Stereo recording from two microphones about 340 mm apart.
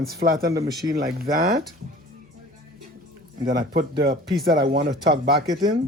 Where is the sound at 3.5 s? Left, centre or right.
Right.